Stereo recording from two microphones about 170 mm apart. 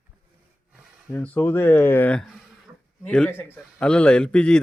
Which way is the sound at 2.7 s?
20° right (ahead or behind).